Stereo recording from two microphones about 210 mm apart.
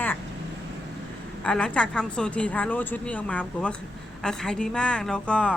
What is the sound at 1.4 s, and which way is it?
A woman's voice, 5° left (ahead or behind).